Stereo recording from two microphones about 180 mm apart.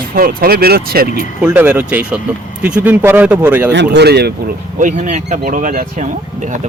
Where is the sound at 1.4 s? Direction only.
5° right (ahead or behind).